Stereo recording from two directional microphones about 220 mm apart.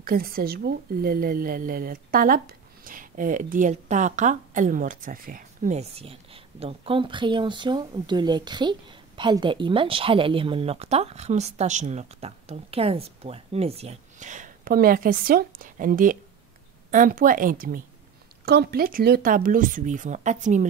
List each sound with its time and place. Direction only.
0.0 s speech: 40° right (ahead or behind)